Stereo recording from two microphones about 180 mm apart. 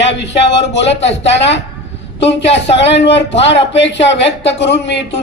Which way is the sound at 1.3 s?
75° left (ahead or behind).